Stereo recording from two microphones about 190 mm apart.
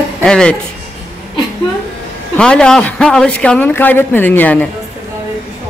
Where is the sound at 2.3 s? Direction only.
5° left (ahead or behind).